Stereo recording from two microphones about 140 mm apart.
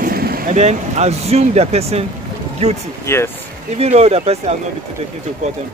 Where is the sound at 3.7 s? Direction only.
50° right (ahead or behind).